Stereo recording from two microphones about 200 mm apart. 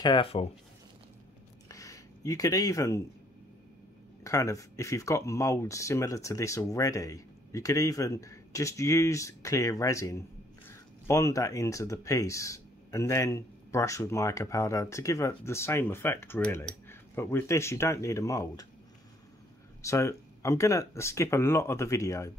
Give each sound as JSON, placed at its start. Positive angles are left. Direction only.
{"t": 0.0, "sound": "speech", "side_deg": 25}
{"t": 1.7, "sound": "a sound", "side_deg": 15}
{"t": 4.2, "sound": "speech", "side_deg": 15}
{"t": 19.8, "sound": "speech", "side_deg": 15}